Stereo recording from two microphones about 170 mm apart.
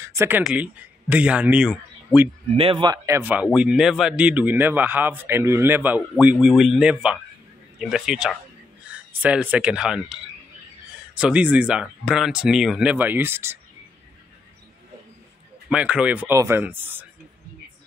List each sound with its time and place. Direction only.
0.0 s a sound: 15° right (ahead or behind)
0.4 s a man's voice: 5° right (ahead or behind)
2.5 s speech: 30° right (ahead or behind)
3.2 s speech: 10° right (ahead or behind)
11.1 s speech: 5° right (ahead or behind)
15.7 s speech: 5° right (ahead or behind)